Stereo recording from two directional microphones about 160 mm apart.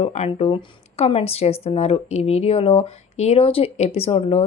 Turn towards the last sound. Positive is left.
turn(degrees=40)  # may be behind; listen again after turning